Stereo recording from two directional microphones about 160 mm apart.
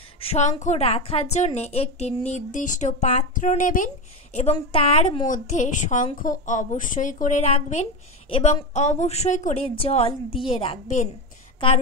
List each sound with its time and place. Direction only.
0.2 s a woman's voice: 45° left (ahead or behind)
5.2 s a woman's voice: 50° left (ahead or behind); by 10.8 s 35° left (ahead or behind)